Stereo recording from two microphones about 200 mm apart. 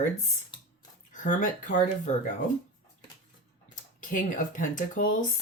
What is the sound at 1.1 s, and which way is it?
Speech, 40° left (ahead or behind).